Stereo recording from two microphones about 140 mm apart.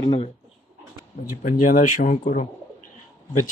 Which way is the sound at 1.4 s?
75° left (ahead or behind).